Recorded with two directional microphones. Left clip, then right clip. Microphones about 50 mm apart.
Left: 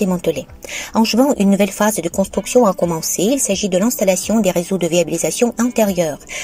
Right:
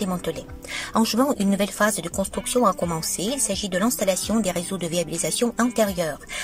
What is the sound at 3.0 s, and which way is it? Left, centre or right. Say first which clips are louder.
Speech: left 9 dB; left.